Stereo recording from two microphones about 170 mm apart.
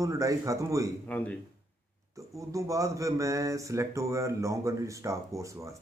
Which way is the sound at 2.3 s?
20° right (ahead or behind).